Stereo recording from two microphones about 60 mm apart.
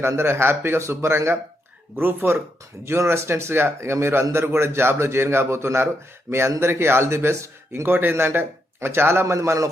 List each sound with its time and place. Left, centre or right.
0.2 s a man's voice: right
7.7 s a man's voice: right
9.2 s a man's voice: right